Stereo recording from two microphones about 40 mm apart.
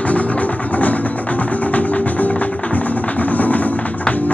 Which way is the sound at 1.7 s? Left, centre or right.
Left.